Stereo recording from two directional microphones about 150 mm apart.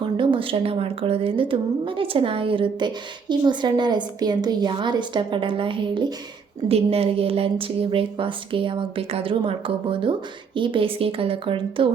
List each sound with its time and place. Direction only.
0.0 s a woman's voice: 35° right (ahead or behind)